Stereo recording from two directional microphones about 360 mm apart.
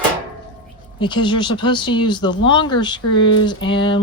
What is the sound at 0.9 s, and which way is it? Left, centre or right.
Speech, centre.